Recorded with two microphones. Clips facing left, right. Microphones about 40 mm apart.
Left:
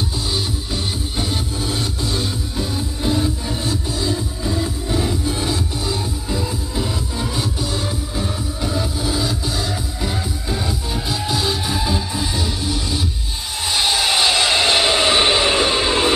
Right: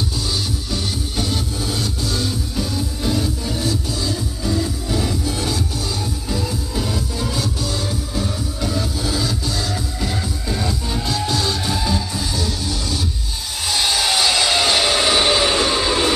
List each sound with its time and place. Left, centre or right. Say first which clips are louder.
1.1 s music: right 1 dB; left
8.2 s music: right 1 dB; centre
11.1 s music: even; centre
13.7 s a sound: left 1 dB; centre